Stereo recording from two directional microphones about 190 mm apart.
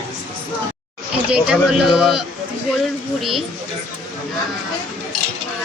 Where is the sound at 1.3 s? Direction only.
5° right (ahead or behind).